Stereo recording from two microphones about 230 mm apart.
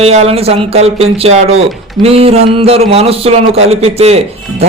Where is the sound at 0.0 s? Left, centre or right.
Right.